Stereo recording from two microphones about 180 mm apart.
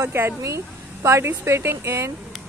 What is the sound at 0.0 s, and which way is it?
Speech, 15° right (ahead or behind).